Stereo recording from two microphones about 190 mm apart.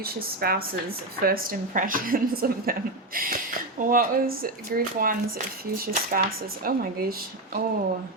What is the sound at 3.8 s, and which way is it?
A woman's voice, 45° right (ahead or behind).